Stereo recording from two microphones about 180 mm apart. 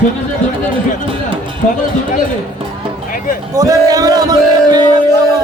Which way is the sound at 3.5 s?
20° right (ahead or behind).